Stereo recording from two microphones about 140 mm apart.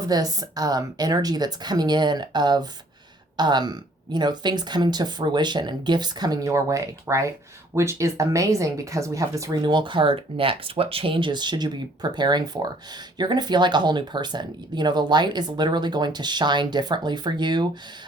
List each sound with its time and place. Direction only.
0.0 s a woman's voice: 25° right (ahead or behind)